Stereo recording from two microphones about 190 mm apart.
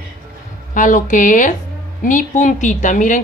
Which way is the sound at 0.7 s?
40° left (ahead or behind).